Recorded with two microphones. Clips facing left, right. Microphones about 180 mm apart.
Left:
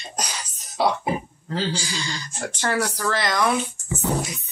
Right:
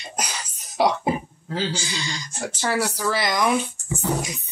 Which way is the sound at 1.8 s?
20° right (ahead or behind).